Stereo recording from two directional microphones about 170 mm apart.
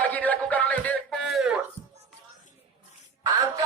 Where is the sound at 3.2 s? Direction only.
20° right (ahead or behind).